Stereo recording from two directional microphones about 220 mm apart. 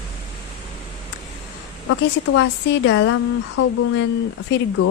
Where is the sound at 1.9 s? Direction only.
75° left (ahead or behind).